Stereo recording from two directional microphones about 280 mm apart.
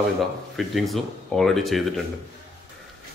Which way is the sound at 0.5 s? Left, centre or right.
Centre.